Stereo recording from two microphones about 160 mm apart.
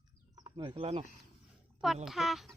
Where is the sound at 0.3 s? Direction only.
30° right (ahead or behind).